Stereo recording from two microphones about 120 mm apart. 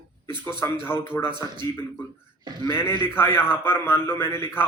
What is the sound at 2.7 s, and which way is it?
Speech, 20° left (ahead or behind).